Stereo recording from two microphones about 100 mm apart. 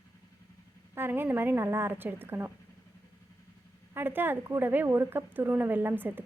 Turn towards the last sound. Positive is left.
turn(degrees=-20)  # may be behind; listen again after turning